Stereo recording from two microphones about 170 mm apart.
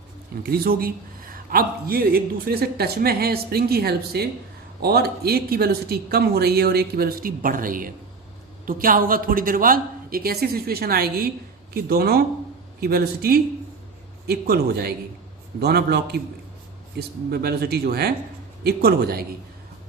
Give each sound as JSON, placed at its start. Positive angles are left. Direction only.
{"t": 0.4, "sound": "a man's voice", "side_deg": -60}